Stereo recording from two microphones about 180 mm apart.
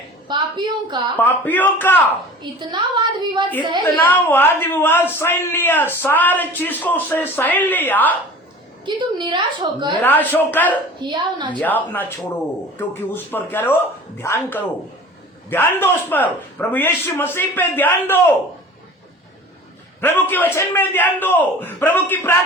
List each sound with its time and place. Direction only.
0.3 s a woman's voice: 25° right (ahead or behind)
1.1 s a man's voice: 10° left (ahead or behind)
2.4 s a woman's voice: 25° right (ahead or behind)
3.9 s a man's voice: 10° left (ahead or behind)
8.8 s a woman's voice: 25° right (ahead or behind)
10.0 s a man's voice: 10° left (ahead or behind)
11.0 s a woman's voice: 25° right (ahead or behind)
11.6 s a man's voice: 10° left (ahead or behind)
20.0 s a man's voice: 10° left (ahead or behind)